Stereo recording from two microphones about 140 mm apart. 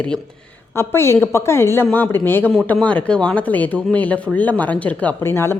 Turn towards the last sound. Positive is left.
turn(degrees=15)  # may be behind; listen again after turning